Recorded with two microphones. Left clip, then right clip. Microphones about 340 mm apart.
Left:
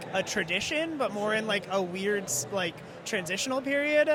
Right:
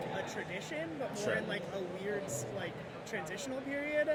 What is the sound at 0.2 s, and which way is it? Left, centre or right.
Speech, left.